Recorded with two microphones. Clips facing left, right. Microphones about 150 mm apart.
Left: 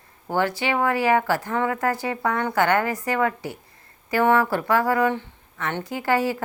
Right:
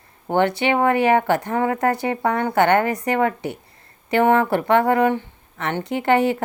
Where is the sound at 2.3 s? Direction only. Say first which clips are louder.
Right 3 dB; 55° right (ahead or behind).